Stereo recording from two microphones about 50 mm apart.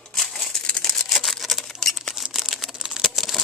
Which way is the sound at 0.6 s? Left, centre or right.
Centre.